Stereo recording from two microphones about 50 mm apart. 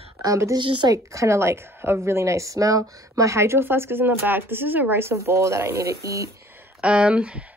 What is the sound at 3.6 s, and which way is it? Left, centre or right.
Speech, right.